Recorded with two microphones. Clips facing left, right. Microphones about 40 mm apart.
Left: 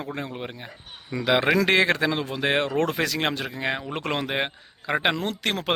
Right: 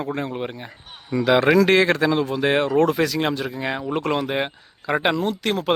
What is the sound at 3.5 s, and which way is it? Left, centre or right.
Speech, left.